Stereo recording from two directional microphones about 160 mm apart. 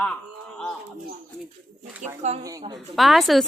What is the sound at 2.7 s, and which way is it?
Speech, centre (ahead or behind).